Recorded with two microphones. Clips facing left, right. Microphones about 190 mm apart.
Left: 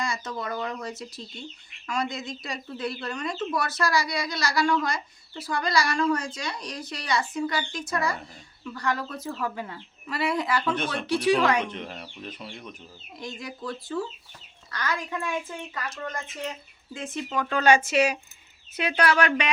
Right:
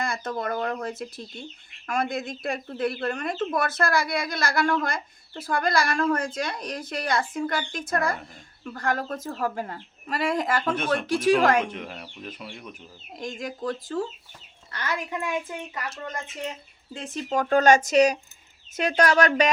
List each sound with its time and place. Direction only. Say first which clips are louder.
0.0 s speech: right 3 dB; 55° right (ahead or behind)
11.6 s speech: right 1 dB; 5° right (ahead or behind)
13.1 s speech: right 4 dB; 45° right (ahead or behind)
14.7 s a child's voice: even; 25° right (ahead or behind)
16.9 s speech: right 3 dB; 40° right (ahead or behind)